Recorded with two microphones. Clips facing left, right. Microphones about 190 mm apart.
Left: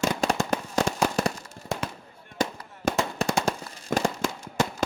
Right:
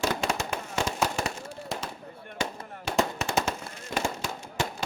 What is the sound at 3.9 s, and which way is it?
Fireworks, 55° left (ahead or behind).